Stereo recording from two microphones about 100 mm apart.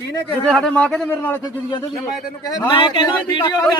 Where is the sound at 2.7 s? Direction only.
65° left (ahead or behind).